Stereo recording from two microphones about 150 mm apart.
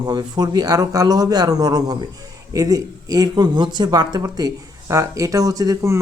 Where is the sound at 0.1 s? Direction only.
30° right (ahead or behind).